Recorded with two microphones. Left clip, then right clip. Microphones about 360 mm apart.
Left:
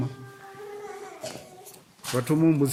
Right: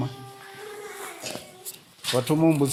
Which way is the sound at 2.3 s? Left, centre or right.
Centre.